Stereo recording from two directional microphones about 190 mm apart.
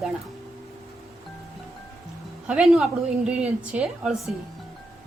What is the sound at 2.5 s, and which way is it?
A woman's voice, 5° right (ahead or behind).